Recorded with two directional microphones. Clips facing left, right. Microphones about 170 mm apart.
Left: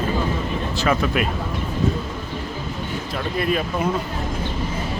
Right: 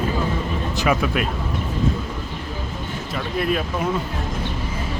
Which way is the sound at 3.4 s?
Centre (ahead or behind).